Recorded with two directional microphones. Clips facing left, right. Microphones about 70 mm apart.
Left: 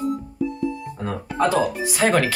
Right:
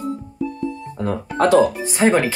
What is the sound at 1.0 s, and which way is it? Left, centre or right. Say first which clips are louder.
Speech: right 4 dB; right.